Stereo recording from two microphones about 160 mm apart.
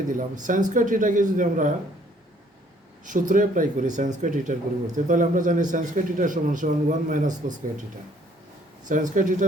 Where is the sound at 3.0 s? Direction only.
55° right (ahead or behind).